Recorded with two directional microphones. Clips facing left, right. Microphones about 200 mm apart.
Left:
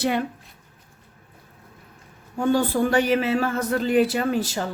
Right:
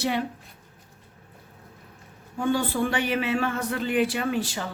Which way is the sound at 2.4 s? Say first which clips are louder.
Left 4 dB; 40° left (ahead or behind).